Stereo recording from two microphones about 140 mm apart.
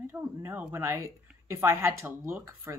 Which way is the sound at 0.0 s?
15° right (ahead or behind).